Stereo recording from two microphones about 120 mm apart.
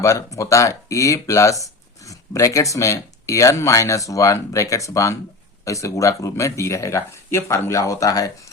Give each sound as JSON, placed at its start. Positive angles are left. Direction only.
{"t": 0.0, "sound": "speech", "side_deg": 25}